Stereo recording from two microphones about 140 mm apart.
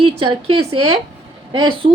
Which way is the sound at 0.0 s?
40° right (ahead or behind).